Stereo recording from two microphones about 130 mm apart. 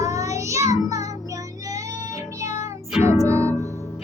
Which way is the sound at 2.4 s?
25° right (ahead or behind).